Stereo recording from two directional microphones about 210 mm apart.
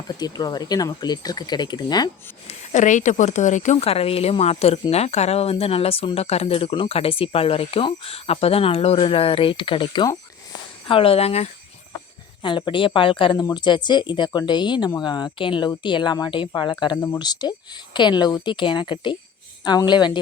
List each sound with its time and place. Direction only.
0.2 s speech: 20° left (ahead or behind)
2.5 s speech: 35° left (ahead or behind)